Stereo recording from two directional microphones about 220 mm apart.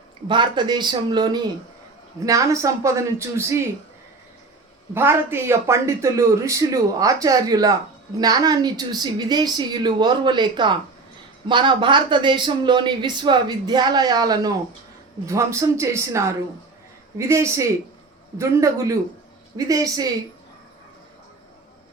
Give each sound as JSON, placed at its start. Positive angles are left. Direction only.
{"t": 0.3, "sound": "speech", "side_deg": -20}
{"t": 4.9, "sound": "speech", "side_deg": -10}